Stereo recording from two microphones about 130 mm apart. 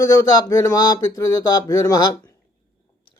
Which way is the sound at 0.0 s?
25° left (ahead or behind).